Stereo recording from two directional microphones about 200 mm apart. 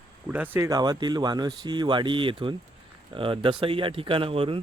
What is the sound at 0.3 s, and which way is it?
Speech, 10° right (ahead or behind).